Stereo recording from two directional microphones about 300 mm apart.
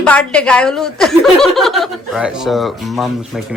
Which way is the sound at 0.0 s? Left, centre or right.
Centre.